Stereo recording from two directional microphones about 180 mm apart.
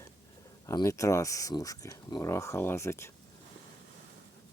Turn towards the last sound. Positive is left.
turn(degrees=15)  # may be behind; listen again after turning